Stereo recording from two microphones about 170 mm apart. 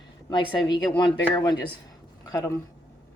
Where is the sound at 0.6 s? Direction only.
25° left (ahead or behind).